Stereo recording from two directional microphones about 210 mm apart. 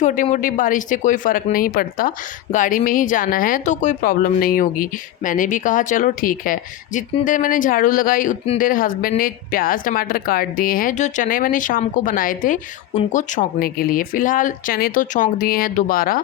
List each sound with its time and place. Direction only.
0.0 s speech: 35° left (ahead or behind)